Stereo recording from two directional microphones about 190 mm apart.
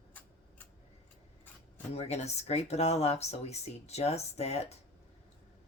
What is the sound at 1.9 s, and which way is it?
Speech, 35° left (ahead or behind).